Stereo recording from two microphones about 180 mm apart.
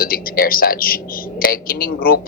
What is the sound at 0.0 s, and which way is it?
Speech, 55° left (ahead or behind).